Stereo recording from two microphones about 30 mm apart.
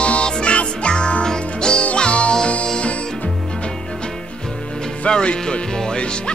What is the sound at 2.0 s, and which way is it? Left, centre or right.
Music, left.